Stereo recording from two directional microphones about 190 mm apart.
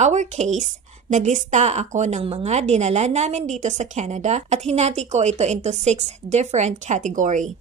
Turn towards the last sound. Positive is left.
turn(degrees=-40)  # may be behind; listen again after turning